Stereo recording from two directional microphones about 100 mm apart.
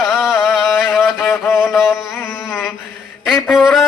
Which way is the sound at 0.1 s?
5° right (ahead or behind).